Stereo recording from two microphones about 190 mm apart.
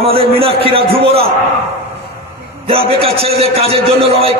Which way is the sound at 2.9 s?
30° right (ahead or behind).